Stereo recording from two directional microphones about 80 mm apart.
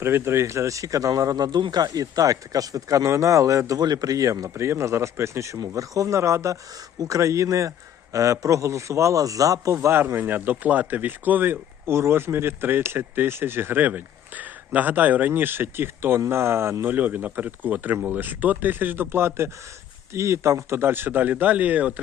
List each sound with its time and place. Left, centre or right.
0.0 s speech: right
9.7 s speech: right